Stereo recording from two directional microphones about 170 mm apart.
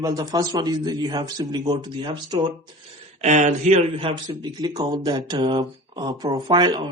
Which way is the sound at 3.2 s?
45° right (ahead or behind).